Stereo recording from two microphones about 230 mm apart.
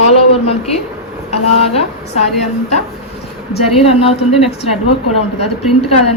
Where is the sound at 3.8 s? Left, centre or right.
Left.